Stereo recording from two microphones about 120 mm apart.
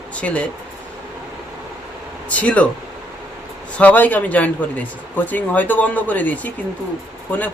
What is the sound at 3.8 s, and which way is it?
Speech, 15° left (ahead or behind).